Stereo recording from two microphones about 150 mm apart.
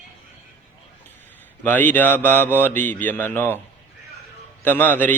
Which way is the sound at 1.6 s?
10° left (ahead or behind).